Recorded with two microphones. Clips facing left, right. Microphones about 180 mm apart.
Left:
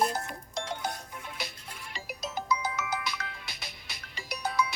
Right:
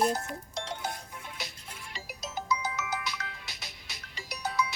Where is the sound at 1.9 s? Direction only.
55° left (ahead or behind).